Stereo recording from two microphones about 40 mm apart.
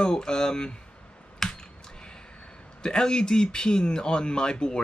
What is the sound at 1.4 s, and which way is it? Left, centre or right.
Finger snapping, centre.